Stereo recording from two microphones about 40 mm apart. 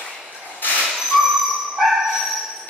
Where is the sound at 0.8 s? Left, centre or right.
Centre.